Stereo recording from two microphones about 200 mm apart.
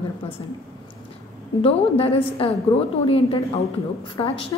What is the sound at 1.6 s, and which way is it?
A woman's voice, 30° left (ahead or behind).